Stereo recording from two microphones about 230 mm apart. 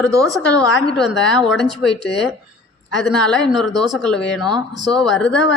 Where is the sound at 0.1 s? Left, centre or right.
Centre.